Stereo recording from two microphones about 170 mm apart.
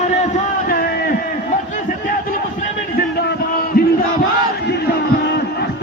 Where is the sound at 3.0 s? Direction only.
60° left (ahead or behind).